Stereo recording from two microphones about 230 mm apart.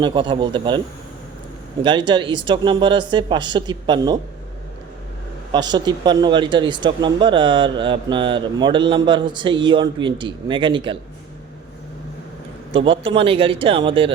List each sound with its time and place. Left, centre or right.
0.0 s speech: right
1.8 s speech: centre
5.5 s speech: centre
12.7 s speech: right